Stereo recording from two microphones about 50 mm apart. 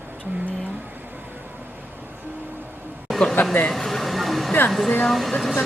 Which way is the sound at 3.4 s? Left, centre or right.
Left.